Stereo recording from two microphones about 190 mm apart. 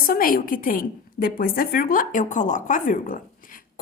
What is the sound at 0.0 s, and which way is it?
A woman's voice, 50° left (ahead or behind).